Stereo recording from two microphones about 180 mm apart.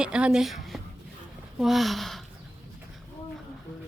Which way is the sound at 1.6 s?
Centre (ahead or behind).